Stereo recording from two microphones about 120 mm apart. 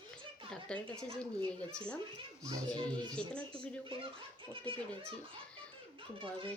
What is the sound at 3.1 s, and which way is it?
Speech, 10° left (ahead or behind).